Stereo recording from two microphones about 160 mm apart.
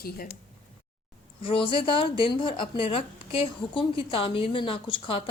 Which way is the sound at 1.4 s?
30° left (ahead or behind).